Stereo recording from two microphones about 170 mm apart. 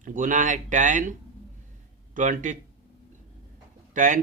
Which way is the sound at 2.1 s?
45° right (ahead or behind).